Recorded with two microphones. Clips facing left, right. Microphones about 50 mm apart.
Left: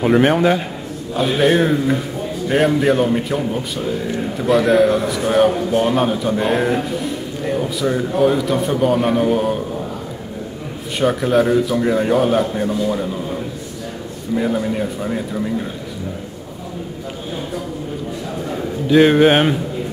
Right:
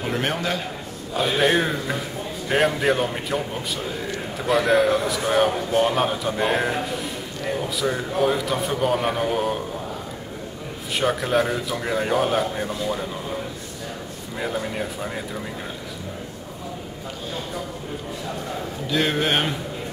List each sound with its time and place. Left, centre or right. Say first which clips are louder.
0.0 s a man's voice: left 11 dB; centre
1.1 s a man's voice: left 5 dB; centre
11.0 s a man's voice: left 5 dB; centre
18.9 s a man's voice: left 11 dB; centre